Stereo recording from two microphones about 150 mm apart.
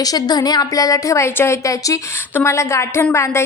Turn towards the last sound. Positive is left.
turn(degrees=15)  # may be behind; listen again after turning